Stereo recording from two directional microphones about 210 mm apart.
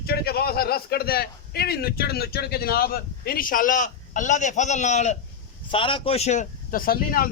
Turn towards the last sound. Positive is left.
turn(degrees=45)  # may be behind; listen again after turning